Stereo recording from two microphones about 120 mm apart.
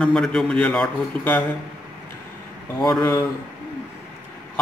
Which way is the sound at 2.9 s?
15° left (ahead or behind).